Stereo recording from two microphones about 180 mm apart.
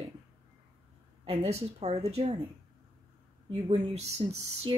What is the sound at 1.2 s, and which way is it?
Speech, 35° right (ahead or behind).